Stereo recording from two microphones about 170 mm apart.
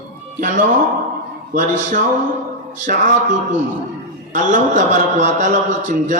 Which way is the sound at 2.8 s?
45° right (ahead or behind).